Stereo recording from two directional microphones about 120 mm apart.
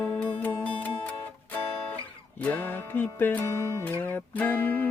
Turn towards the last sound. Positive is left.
turn(degrees=15)  # may be behind; listen again after turning